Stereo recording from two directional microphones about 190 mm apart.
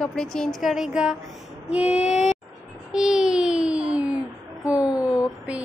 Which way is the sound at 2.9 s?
5° right (ahead or behind).